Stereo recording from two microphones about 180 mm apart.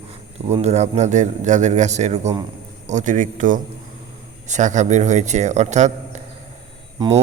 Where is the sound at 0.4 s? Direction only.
35° right (ahead or behind).